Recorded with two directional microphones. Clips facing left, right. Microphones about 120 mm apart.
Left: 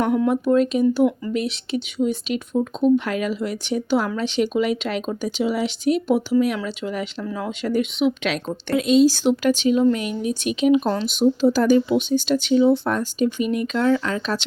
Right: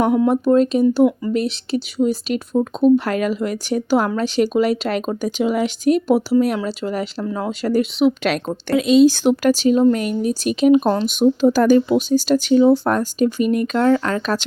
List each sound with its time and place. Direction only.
0.3 s speech: 35° right (ahead or behind)
8.7 s speech: 85° right; by 9.5 s 55° right (ahead or behind)
9.5 s speech: 40° right (ahead or behind)
11.1 s speech: 50° right (ahead or behind)